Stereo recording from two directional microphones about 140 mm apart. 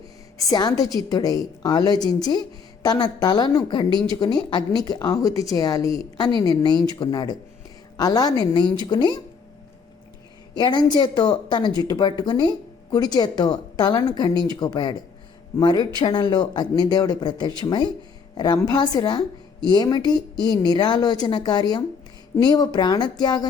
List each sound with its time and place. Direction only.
0.5 s speech: 25° left (ahead or behind)
10.5 s speech: 30° left (ahead or behind)